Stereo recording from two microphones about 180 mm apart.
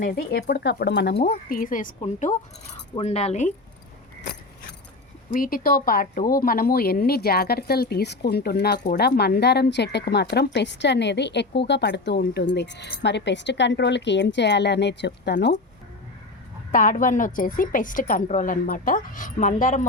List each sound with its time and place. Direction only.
0.0 s speech: 55° left (ahead or behind)
1.3 s a woman's voice: 50° left (ahead or behind)
5.3 s speech: 50° left (ahead or behind); by 15.5 s 65° left (ahead or behind)
16.7 s a woman's voice: 50° left (ahead or behind)